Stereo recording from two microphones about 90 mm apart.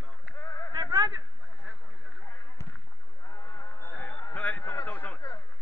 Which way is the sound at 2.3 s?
30° left (ahead or behind).